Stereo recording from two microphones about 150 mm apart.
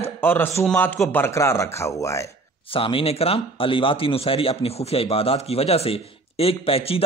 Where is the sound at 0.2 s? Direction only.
15° left (ahead or behind).